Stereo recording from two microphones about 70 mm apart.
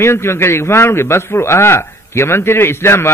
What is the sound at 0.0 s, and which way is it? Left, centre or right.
A man's voice, left.